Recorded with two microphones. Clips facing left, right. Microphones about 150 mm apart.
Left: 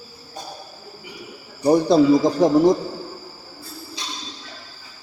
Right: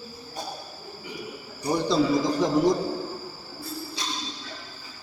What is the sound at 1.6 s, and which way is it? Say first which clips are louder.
Speech: left 8 dB; 55° left (ahead or behind).